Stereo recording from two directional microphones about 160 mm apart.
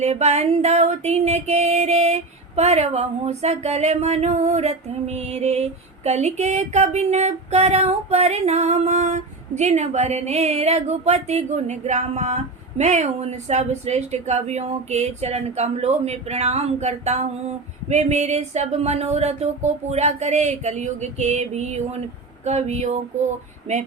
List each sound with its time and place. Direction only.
0.0 s music: 40° right (ahead or behind)